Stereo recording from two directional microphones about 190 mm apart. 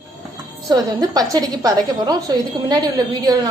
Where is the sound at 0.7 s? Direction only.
20° right (ahead or behind).